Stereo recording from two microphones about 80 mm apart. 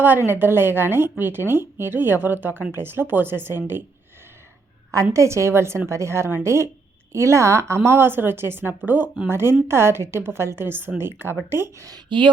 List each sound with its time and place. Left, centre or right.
0.3 s speech: right
4.9 s a woman's voice: right
12.0 s speech: right